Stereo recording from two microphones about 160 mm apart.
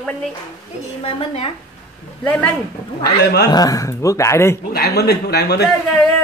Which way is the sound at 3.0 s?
80° left.